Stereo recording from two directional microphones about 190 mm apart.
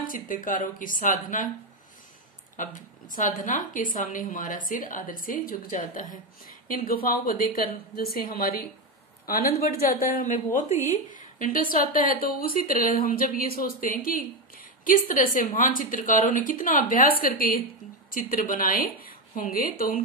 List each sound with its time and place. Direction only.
0.0 s a woman's voice: 45° left (ahead or behind)
2.5 s a woman's voice: 40° left (ahead or behind)